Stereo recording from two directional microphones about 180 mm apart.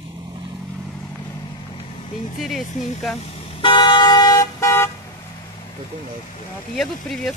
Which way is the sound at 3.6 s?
25° left (ahead or behind).